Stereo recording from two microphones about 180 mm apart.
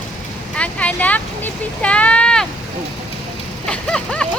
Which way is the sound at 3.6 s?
5° left (ahead or behind).